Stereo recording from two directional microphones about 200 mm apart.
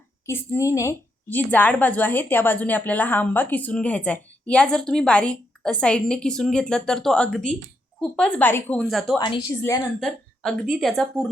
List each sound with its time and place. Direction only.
0.3 s a woman's voice: 15° left (ahead or behind)
9.1 s a woman's voice: 20° left (ahead or behind)
10.0 s speech: centre (ahead or behind)